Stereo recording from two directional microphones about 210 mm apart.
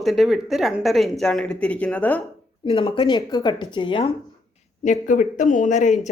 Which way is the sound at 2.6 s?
25° left (ahead or behind).